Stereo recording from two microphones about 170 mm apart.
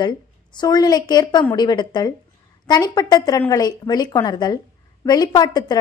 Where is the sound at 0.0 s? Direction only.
25° left (ahead or behind).